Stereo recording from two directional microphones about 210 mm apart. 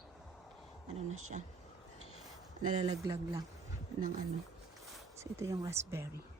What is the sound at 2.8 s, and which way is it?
Speech, 20° right (ahead or behind).